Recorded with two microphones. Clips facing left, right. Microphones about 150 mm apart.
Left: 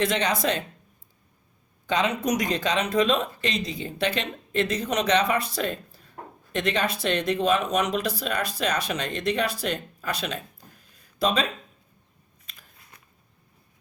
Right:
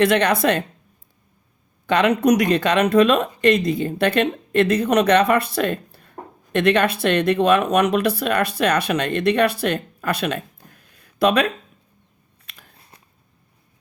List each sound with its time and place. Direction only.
0.0 s speech: 60° right (ahead or behind)
1.9 s speech: 65° right (ahead or behind)
12.5 s biting: 75° right (ahead or behind)